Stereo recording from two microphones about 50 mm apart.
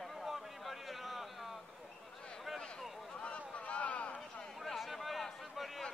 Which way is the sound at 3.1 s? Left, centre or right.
Left.